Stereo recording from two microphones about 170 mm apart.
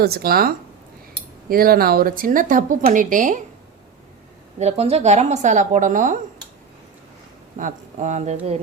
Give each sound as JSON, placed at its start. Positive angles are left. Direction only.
{"t": 0.0, "sound": "speech", "side_deg": -65}
{"t": 4.6, "sound": "a woman's voice", "side_deg": -40}
{"t": 7.6, "sound": "a woman's voice", "side_deg": -45}